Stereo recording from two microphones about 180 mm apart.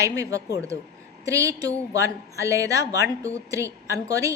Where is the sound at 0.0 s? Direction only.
15° right (ahead or behind).